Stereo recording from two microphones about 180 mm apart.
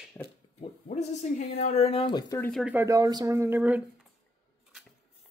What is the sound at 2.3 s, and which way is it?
Speech, 5° left (ahead or behind).